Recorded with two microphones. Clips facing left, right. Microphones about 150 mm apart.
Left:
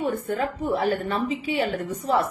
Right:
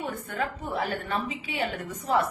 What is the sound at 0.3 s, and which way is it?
A woman's voice, 35° left (ahead or behind).